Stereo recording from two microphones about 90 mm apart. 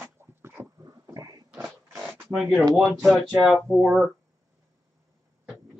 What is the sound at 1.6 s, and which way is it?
Zipper, centre (ahead or behind).